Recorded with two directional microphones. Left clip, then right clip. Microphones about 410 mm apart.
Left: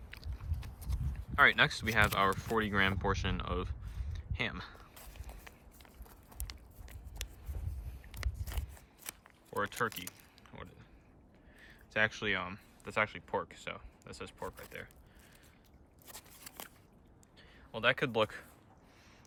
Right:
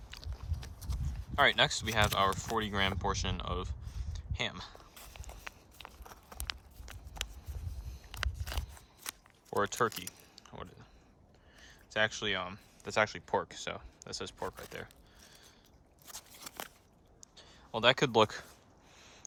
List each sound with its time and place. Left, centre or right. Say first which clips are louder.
0.1 s biting: right 2 dB; centre
1.4 s speech: left 1 dB; centre
5.8 s a sound: right 10 dB; centre
8.2 s biting: right 8 dB; centre
9.0 s a sound: right 5 dB; centre
11.6 s speech: even; centre
16.0 s scissors: right 4 dB; centre
17.3 s speech: right 6 dB; centre